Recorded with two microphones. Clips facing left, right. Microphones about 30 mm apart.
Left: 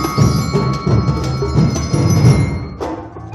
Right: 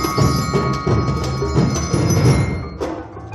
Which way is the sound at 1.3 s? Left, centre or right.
Centre.